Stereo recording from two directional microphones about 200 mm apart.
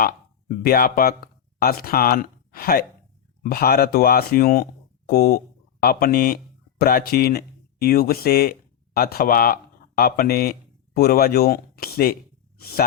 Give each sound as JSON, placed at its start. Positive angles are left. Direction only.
{"t": 0.0, "sound": "speech", "side_deg": 45}